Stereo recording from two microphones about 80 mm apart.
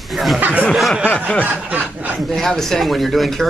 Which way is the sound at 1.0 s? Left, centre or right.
Centre.